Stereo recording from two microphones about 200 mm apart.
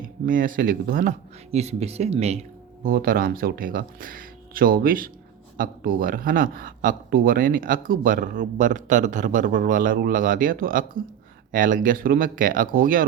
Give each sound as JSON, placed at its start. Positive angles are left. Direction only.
{"t": 0.3, "sound": "speech", "side_deg": -45}
{"t": 2.8, "sound": "a man's voice", "side_deg": -45}